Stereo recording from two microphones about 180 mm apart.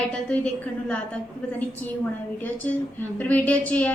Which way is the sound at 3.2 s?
10° left (ahead or behind).